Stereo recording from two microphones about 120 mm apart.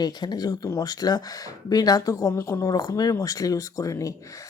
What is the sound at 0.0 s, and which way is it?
Speech, 35° left (ahead or behind).